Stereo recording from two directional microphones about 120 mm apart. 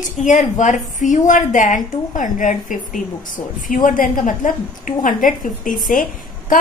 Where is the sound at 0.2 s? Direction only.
90° left.